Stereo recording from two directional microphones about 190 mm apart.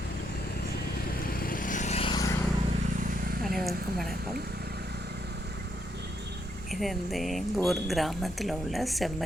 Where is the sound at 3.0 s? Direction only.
45° right (ahead or behind).